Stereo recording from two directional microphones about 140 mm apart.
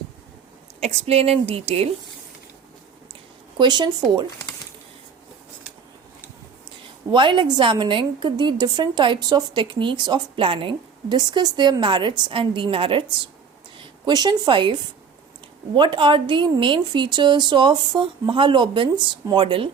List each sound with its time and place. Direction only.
0.8 s a woman's voice: 50° right (ahead or behind)
3.6 s a woman's voice: 30° right (ahead or behind)
7.1 s a woman's voice: 35° right (ahead or behind)